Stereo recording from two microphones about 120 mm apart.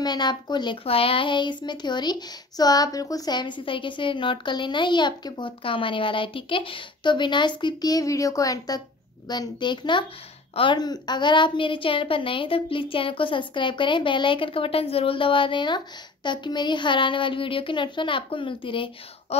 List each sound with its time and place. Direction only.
0.0 s speech: 35° left (ahead or behind)
0.8 s speech: 50° left (ahead or behind)